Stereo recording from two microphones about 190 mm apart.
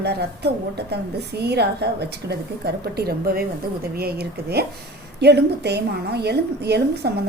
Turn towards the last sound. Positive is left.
turn(degrees=-60)  # may be behind; listen again after turning